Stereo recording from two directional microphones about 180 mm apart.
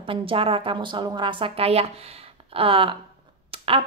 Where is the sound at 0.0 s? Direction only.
30° right (ahead or behind).